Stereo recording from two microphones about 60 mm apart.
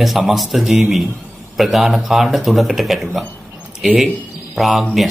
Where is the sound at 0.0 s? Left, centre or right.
Centre.